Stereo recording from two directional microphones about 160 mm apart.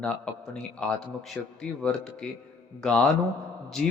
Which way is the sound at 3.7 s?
Centre (ahead or behind).